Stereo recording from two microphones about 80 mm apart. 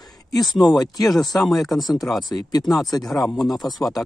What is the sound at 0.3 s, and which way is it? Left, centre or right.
Speech, left.